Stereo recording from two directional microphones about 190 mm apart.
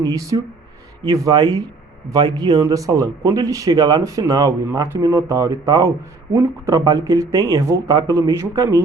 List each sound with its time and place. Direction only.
0.0 s speech: 20° right (ahead or behind)